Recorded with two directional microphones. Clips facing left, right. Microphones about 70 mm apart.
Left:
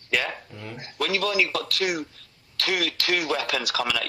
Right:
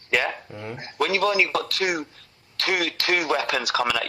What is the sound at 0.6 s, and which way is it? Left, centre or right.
Speech, right.